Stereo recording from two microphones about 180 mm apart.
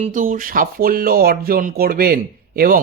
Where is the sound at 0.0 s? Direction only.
45° right (ahead or behind).